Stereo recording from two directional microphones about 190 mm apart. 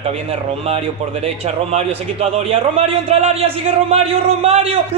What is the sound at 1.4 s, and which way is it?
A man's voice, 35° right (ahead or behind).